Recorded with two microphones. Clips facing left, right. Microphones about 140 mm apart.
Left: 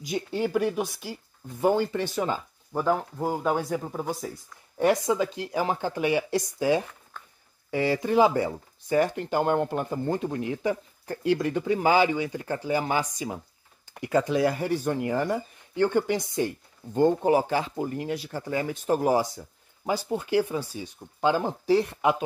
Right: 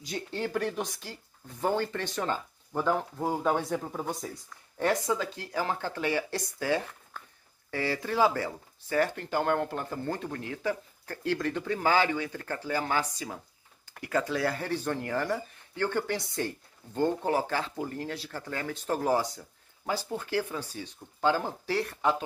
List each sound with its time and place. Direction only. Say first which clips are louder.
0.0 s speech: left 6 dB; 15° left (ahead or behind)
4.7 s speech: left 5 dB; 15° left (ahead or behind)